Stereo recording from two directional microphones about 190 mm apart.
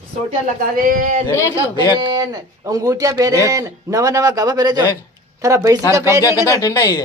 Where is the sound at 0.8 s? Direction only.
45° right (ahead or behind).